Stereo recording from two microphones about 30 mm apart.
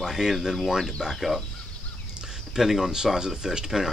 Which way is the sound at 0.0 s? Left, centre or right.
Centre.